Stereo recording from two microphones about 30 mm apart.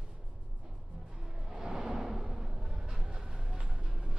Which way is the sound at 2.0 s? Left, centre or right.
Centre.